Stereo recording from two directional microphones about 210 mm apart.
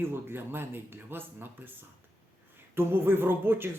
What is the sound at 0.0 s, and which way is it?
Speech, 10° right (ahead or behind).